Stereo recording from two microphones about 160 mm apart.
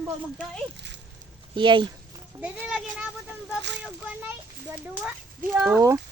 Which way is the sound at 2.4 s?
5° right (ahead or behind).